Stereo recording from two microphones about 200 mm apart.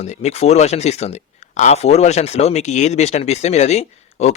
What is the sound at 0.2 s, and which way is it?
Speech, 30° left (ahead or behind).